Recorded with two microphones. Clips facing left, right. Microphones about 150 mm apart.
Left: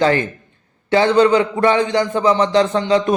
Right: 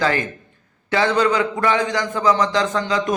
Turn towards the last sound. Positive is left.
turn(degrees=30)  # may be behind; listen again after turning